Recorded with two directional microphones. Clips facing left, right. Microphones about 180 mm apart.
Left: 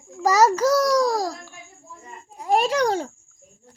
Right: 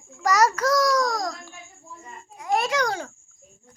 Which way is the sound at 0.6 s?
30° left (ahead or behind).